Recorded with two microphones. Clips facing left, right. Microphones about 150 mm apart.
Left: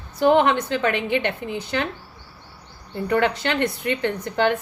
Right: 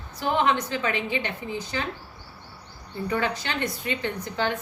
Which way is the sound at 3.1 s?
65° left (ahead or behind).